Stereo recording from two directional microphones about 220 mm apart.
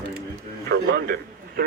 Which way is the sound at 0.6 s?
45° right (ahead or behind).